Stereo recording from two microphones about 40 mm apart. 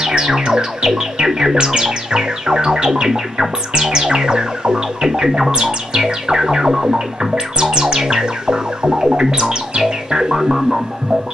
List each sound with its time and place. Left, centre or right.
0.0 s music: centre